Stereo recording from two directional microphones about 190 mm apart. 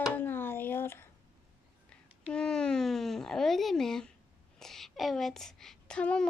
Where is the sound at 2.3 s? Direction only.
5° left (ahead or behind).